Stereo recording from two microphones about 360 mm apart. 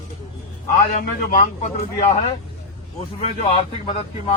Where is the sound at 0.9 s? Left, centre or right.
Left.